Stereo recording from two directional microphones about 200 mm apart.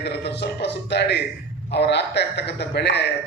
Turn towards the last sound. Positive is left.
turn(degrees=60)  # may be behind; listen again after turning